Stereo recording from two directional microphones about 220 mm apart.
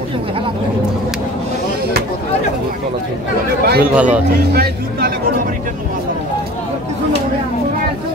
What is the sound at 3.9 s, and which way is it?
Speech, 5° right (ahead or behind).